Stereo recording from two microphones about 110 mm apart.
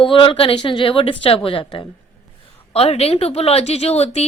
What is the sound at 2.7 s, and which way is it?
A woman's voice, 65° left (ahead or behind).